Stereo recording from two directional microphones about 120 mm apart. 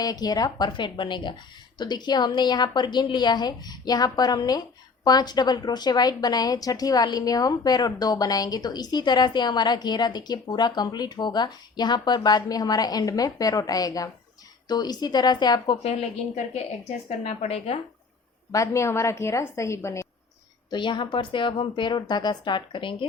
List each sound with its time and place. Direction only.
0.0 s a woman's voice: 35° left (ahead or behind)
15.8 s a woman's voice: 60° left (ahead or behind)
18.5 s a woman's voice: 25° left (ahead or behind)
20.7 s a woman's voice: 40° left (ahead or behind)